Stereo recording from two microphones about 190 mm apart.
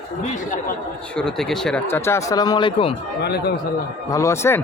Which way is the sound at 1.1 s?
Centre (ahead or behind).